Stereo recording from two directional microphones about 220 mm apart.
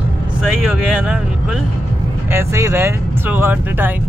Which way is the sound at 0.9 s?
5° right (ahead or behind).